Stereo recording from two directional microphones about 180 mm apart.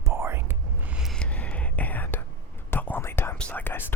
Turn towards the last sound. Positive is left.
turn(degrees=10)  # may be behind; listen again after turning